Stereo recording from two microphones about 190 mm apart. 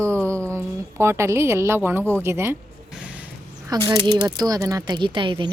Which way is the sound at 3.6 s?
20° right (ahead or behind).